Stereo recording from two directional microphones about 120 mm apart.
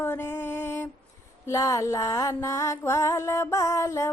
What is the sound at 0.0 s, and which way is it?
Mantra, 20° left (ahead or behind).